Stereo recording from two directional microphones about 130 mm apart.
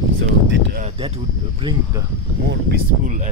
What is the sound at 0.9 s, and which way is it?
Speech, 45° right (ahead or behind).